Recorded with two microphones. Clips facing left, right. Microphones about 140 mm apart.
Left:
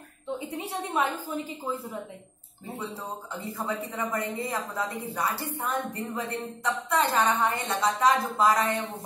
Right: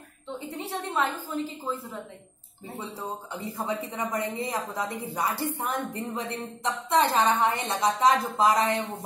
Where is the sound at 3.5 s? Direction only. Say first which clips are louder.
Right 1 dB; 15° right (ahead or behind).